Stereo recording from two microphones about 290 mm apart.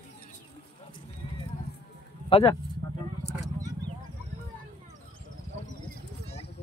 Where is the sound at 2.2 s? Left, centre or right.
Centre.